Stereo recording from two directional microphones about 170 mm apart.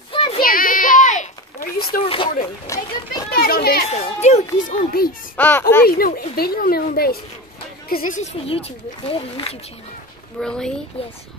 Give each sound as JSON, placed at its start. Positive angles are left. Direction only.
{"t": 0.1, "sound": "child singing", "side_deg": 30}
{"t": 0.4, "sound": "a sound", "side_deg": 55}
{"t": 2.0, "sound": "a sound", "side_deg": 30}
{"t": 2.6, "sound": "a child's voice", "side_deg": 20}
{"t": 3.3, "sound": "children playing", "side_deg": 60}
{"t": 3.9, "sound": "speech", "side_deg": 40}
{"t": 4.6, "sound": "a woman's voice", "side_deg": 60}
{"t": 5.4, "sound": "a child's voice", "side_deg": 10}
{"t": 5.9, "sound": "a woman's voice", "side_deg": 60}
{"t": 7.9, "sound": "speech", "side_deg": 50}
{"t": 10.4, "sound": "speech", "side_deg": 5}